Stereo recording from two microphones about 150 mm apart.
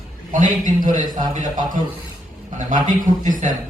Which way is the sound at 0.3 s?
60° right (ahead or behind).